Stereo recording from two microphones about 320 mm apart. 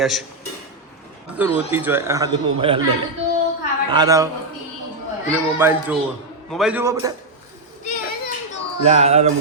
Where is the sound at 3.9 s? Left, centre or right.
Centre.